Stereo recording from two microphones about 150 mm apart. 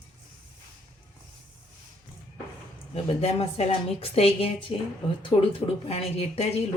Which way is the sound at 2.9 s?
40° left (ahead or behind).